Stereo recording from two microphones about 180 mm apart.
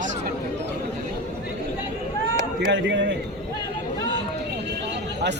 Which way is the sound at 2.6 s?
90° right.